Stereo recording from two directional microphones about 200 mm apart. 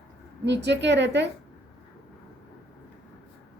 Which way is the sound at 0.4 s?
60° right (ahead or behind).